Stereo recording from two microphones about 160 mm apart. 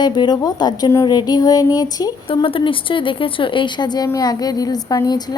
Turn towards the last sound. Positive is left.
turn(degrees=25)  # may be behind; listen again after turning